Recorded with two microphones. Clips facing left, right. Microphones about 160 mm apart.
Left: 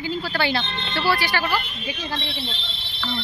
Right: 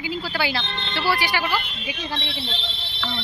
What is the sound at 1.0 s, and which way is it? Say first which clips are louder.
Speech: left 1 dB; 15° right (ahead or behind).